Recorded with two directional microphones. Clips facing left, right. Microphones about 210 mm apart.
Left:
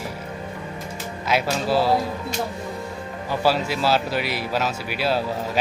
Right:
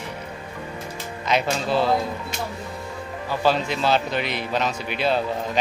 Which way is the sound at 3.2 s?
5° left (ahead or behind).